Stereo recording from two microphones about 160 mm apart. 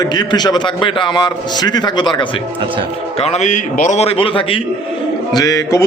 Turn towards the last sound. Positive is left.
turn(degrees=20)  # may be behind; listen again after turning